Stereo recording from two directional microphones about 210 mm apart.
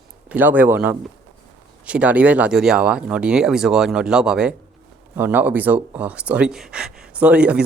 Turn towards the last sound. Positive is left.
turn(degrees=-5)  # may be behind; listen again after turning